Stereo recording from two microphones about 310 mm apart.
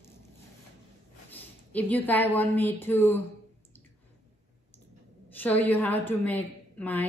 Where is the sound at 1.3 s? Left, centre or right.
Centre.